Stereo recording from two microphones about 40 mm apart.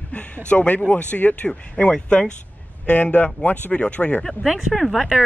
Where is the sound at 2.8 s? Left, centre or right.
Left.